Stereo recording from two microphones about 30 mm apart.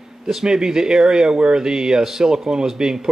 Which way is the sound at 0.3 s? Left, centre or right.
Centre.